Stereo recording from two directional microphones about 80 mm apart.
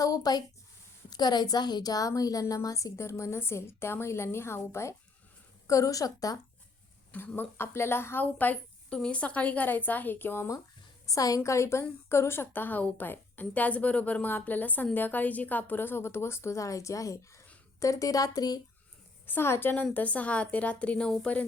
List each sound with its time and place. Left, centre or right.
0.0 s a woman's voice: left
7.1 s a woman's voice: left
11.0 s a woman's voice: left
19.2 s a woman's voice: left